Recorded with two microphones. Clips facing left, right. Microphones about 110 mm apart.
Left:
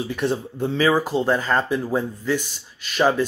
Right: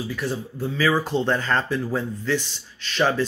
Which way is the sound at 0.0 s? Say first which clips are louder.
Left 4 dB; 20° left (ahead or behind).